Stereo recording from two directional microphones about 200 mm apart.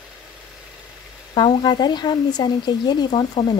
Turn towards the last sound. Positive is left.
turn(degrees=20)  # may be behind; listen again after turning